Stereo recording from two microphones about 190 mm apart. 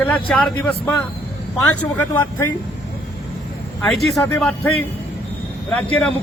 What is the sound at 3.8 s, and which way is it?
Speech, centre (ahead or behind).